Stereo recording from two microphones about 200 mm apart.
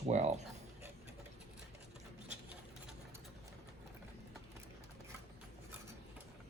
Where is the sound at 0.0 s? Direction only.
35° right (ahead or behind).